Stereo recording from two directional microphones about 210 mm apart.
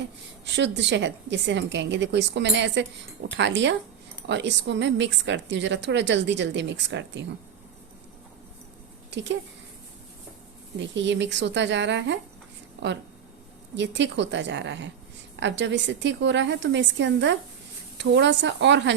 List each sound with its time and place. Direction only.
0.4 s a woman's voice: 55° right (ahead or behind)
9.0 s speech: 60° right (ahead or behind)
10.8 s a woman's voice: 60° right (ahead or behind)
13.7 s a woman's voice: 55° right (ahead or behind)